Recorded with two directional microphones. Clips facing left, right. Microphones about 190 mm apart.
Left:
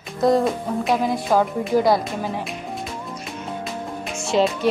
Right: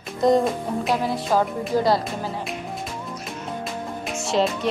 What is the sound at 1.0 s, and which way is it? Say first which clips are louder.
Speech: left 2 dB; 15° left (ahead or behind).